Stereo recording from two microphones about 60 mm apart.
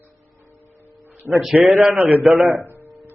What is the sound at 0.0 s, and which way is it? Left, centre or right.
Music, right.